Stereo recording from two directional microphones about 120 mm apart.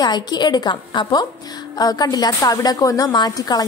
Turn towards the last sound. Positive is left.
turn(degrees=35)  # may be behind; listen again after turning